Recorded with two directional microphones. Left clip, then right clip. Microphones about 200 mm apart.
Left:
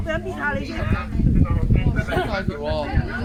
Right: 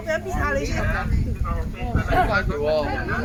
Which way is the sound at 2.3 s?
60° left (ahead or behind).